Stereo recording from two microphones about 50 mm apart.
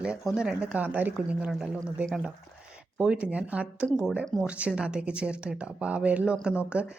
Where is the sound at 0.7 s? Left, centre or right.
Right.